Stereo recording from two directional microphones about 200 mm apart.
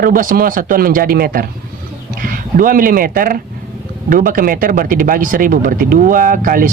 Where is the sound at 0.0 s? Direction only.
45° right (ahead or behind).